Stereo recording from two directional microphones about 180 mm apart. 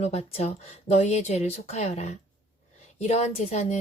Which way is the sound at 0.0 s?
35° left (ahead or behind).